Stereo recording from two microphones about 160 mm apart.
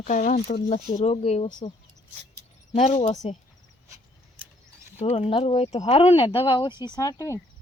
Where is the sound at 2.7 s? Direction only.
40° left (ahead or behind).